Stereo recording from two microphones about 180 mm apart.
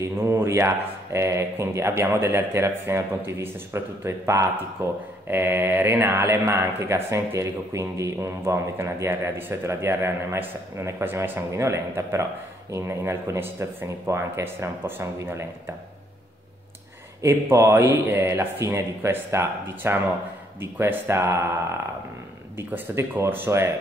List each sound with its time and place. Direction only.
0.0 s speech: 15° right (ahead or behind)
17.2 s speech: 15° right (ahead or behind)
22.6 s speech: 10° right (ahead or behind)